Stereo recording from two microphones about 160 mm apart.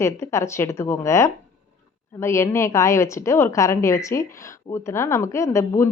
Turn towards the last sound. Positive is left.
turn(degrees=20)  # may be behind; listen again after turning